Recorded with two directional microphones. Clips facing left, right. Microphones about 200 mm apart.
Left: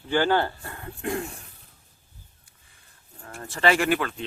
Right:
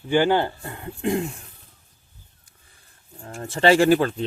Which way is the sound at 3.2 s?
25° right (ahead or behind).